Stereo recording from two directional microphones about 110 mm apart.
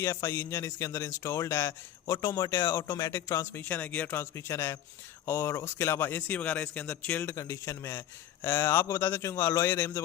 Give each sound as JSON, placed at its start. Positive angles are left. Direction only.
{"t": 0.0, "sound": "speech", "side_deg": 25}
{"t": 7.3, "sound": "speech", "side_deg": 30}